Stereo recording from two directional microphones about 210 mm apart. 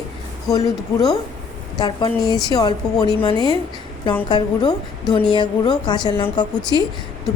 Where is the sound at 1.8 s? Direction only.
20° left (ahead or behind).